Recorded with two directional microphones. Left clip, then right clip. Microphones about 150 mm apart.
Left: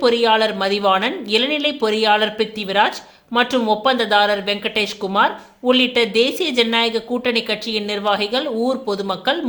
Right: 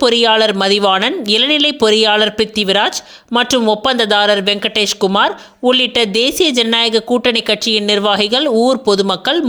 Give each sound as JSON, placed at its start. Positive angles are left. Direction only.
{"t": 0.0, "sound": "speech", "side_deg": -50}